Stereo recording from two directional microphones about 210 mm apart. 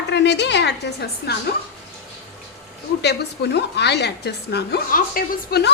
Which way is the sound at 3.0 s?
50° left (ahead or behind).